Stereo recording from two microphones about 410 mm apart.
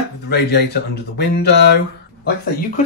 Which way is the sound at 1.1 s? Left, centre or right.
Left.